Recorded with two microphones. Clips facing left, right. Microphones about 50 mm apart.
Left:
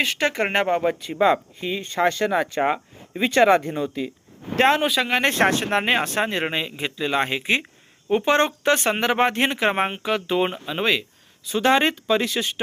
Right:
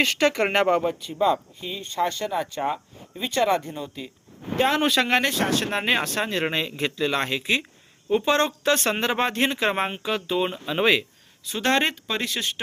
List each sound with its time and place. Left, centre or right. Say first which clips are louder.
0.0 s speech: right 1 dB; centre
0.9 s speech: left 3 dB; left
4.8 s speech: right 1 dB; centre
5.3 s speech: left 5 dB; left
5.8 s speech: left 2 dB; left
6.4 s speech: even; centre
10.0 s speech: left 3 dB; left
10.7 s speech: right 2 dB; centre